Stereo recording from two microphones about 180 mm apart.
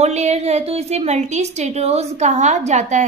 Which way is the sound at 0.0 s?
40° right (ahead or behind).